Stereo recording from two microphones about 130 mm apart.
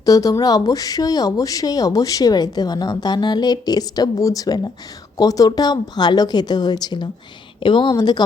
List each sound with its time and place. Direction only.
0.0 s a woman's voice: 25° left (ahead or behind)